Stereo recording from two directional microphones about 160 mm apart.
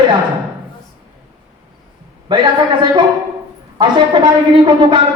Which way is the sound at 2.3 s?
30° right (ahead or behind).